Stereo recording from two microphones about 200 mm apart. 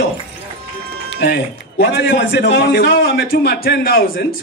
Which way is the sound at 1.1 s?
55° left (ahead or behind).